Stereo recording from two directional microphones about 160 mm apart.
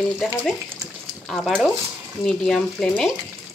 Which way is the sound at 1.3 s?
Centre (ahead or behind).